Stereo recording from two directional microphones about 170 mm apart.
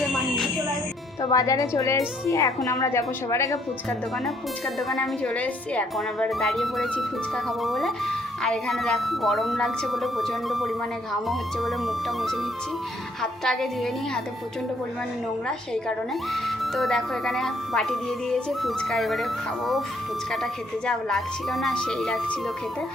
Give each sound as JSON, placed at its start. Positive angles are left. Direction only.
{"t": 1.2, "sound": "a woman's voice", "side_deg": 20}
{"t": 4.9, "sound": "speech", "side_deg": 5}
{"t": 13.4, "sound": "speech", "side_deg": 0}
{"t": 15.4, "sound": "speech", "side_deg": 5}